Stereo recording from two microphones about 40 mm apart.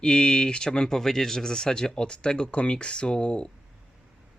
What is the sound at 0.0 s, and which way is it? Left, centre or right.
Speech, left.